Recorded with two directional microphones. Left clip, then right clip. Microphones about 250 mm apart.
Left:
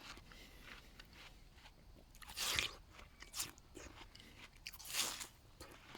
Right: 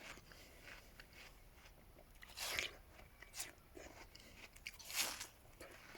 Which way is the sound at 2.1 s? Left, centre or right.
Left.